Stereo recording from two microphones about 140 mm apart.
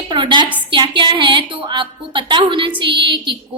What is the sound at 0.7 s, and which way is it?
A woman's voice, 35° right (ahead or behind).